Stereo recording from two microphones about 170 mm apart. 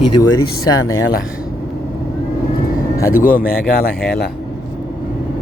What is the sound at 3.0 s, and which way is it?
Speech, 55° left (ahead or behind).